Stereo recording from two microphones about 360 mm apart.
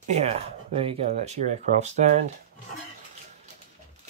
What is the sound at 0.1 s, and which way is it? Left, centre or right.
Speech, centre.